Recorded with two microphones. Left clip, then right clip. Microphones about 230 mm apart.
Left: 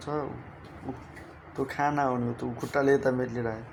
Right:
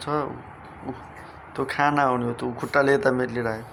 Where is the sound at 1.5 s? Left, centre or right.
Centre.